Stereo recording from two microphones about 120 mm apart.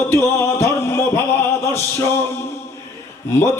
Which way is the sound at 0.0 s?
20° left (ahead or behind).